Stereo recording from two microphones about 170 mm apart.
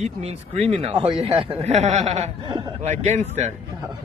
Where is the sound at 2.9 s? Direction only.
45° right (ahead or behind).